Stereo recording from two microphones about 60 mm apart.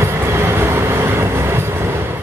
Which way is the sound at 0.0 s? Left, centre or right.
Right.